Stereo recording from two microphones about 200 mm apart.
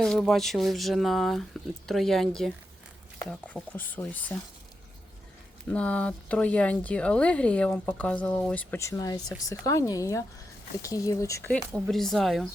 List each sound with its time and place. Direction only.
0.0 s speech: centre (ahead or behind)
5.6 s speech: 5° left (ahead or behind)
11.7 s speech: centre (ahead or behind)